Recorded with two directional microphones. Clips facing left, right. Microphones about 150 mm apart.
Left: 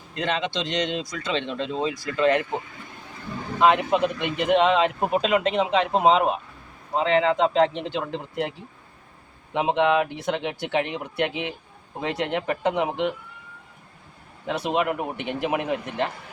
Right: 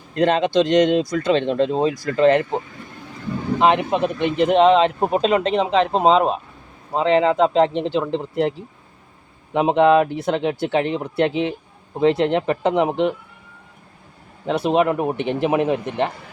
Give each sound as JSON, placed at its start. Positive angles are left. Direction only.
{"t": 0.1, "sound": "speech", "side_deg": -40}
{"t": 3.6, "sound": "speech", "side_deg": -25}
{"t": 14.4, "sound": "speech", "side_deg": -30}